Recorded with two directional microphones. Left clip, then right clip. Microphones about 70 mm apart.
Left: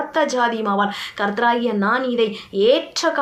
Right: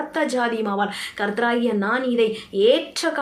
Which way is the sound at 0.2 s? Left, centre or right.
Right.